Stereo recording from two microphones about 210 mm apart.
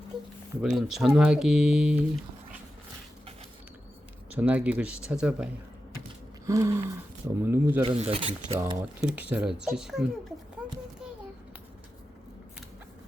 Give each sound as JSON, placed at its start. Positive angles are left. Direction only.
{"t": 0.6, "sound": "speech", "side_deg": 0}
{"t": 4.4, "sound": "speech", "side_deg": -5}
{"t": 6.4, "sound": "a sound", "side_deg": -15}
{"t": 7.4, "sound": "speech", "side_deg": -10}
{"t": 7.8, "sound": "speech", "side_deg": -25}
{"t": 9.0, "sound": "speech", "side_deg": -5}